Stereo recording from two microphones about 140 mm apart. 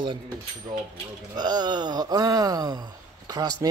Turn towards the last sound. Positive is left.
turn(degrees=-25)  # may be behind; listen again after turning